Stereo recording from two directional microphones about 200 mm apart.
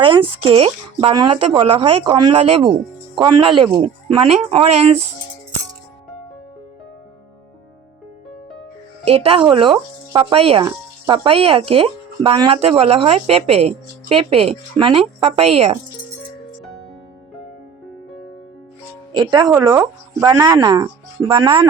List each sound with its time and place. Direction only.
0.0 s speech: 25° right (ahead or behind)
9.0 s speech: 30° right (ahead or behind)
19.1 s speech: 20° right (ahead or behind)